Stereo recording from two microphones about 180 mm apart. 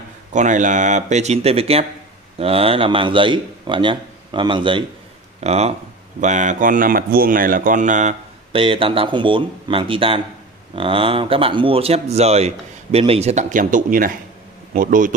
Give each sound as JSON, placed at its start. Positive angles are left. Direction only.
{"t": 0.3, "sound": "a man's voice", "side_deg": -45}
{"t": 8.5, "sound": "a man's voice", "side_deg": -30}